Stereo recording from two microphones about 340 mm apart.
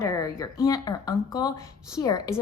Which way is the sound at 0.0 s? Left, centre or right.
Centre.